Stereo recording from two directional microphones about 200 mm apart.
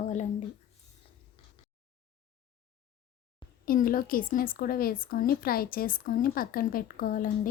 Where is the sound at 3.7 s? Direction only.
45° left (ahead or behind).